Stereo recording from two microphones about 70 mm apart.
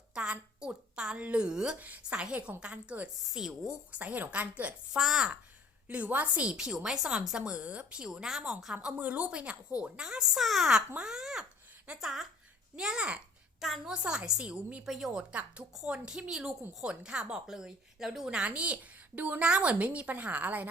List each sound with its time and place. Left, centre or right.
0.1 s a sound: centre
1.8 s a woman's voice: right
2.1 s a woman's voice: centre
3.2 s a woman's voice: centre
3.9 s a woman's voice: right
4.9 s speech: centre
5.9 s a woman's voice: right
6.5 s a woman's voice: centre
14.8 s speech: centre
15.2 s a woman's voice: centre